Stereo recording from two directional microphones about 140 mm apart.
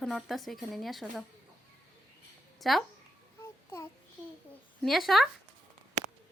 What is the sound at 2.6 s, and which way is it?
Speech, centre (ahead or behind).